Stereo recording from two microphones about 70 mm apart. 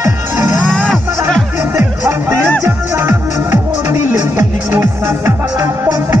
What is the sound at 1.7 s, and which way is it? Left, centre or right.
Music, right.